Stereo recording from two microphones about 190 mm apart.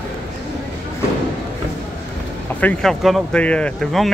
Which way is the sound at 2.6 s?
5° left (ahead or behind).